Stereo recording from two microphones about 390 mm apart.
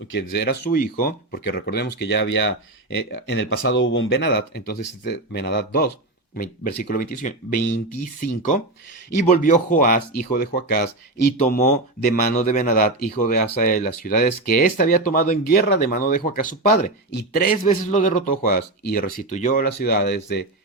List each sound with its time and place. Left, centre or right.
0.1 s speech: left